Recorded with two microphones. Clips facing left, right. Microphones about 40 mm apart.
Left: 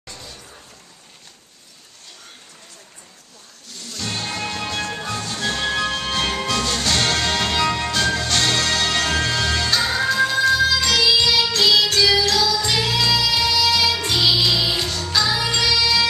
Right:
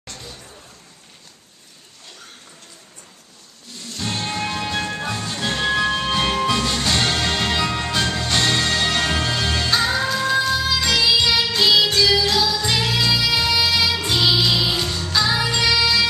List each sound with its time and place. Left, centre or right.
4.0 s music: centre
5.6 s music: centre
12.0 s music: centre
12.3 s music: centre
12.5 s music: centre
13.7 s music: centre